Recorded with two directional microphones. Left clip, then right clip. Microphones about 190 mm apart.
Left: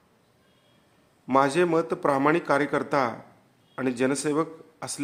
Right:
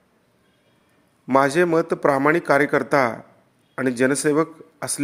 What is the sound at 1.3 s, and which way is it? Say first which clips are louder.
Speech: right 4 dB; 25° right (ahead or behind).